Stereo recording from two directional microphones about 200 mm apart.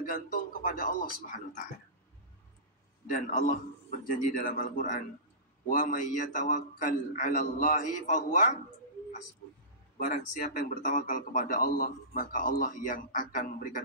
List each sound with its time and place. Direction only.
0.0 s a man's voice: 45° left (ahead or behind)
3.1 s a man's voice: 40° left (ahead or behind)
9.9 s speech: 40° left (ahead or behind)